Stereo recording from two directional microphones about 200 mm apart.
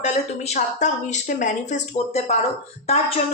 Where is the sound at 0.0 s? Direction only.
35° left (ahead or behind).